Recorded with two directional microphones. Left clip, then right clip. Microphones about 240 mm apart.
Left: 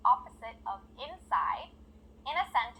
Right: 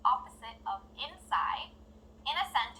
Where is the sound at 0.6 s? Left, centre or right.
Left.